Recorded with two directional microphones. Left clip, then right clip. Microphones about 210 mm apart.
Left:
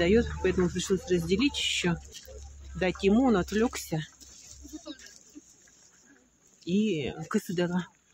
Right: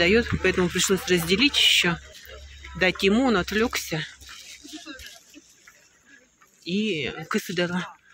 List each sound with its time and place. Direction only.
0.0 s speech: 5° left (ahead or behind)
6.6 s speech: 10° left (ahead or behind)